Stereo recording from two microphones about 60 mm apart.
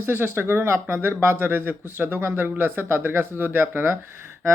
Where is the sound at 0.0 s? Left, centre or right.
Right.